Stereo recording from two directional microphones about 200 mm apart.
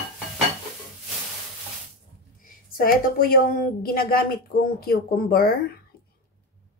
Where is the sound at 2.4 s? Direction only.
45° left (ahead or behind).